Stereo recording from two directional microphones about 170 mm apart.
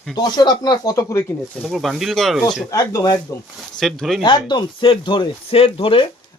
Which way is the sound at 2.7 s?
20° left (ahead or behind).